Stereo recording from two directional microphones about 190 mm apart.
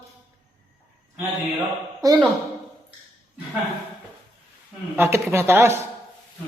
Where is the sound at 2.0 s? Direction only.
20° right (ahead or behind).